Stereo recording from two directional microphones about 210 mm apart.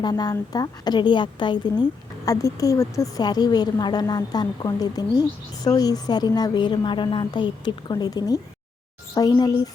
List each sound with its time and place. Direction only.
0.0 s a woman's voice: 20° left (ahead or behind)